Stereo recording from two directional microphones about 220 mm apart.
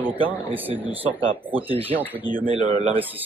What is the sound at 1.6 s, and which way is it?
Speech, 25° right (ahead or behind).